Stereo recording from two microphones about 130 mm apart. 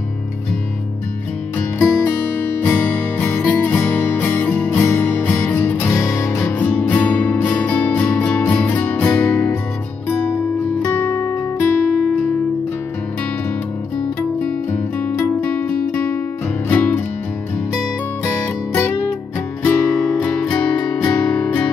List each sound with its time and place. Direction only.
1.8 s music: 15° left (ahead or behind)
6.6 s music: 10° left (ahead or behind)
10.8 s music: 15° left (ahead or behind)
13.9 s music: 15° left (ahead or behind)
18.2 s music: 20° left (ahead or behind)